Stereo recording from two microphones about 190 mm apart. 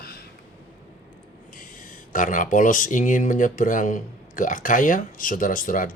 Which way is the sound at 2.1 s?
45° left (ahead or behind).